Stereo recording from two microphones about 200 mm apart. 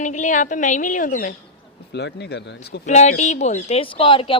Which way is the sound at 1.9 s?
60° left (ahead or behind).